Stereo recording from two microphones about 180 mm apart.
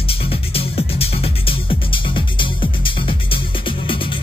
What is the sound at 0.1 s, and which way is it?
Music, 30° left (ahead or behind).